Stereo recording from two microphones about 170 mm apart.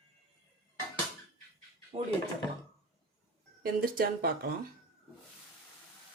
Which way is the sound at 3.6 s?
60° right (ahead or behind).